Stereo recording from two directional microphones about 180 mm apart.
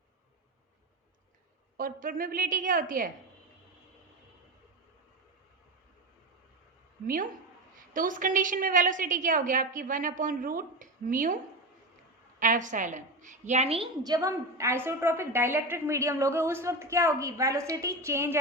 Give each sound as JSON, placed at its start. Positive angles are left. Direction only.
{"t": 1.7, "sound": "a woman's voice", "side_deg": -50}
{"t": 7.9, "sound": "a woman's voice", "side_deg": -50}
{"t": 12.4, "sound": "a woman's voice", "side_deg": -45}